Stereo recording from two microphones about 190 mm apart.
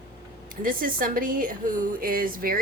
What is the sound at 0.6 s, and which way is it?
A woman's voice, 45° right (ahead or behind).